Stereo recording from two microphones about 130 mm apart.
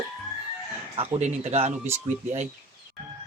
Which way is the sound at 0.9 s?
50° right (ahead or behind).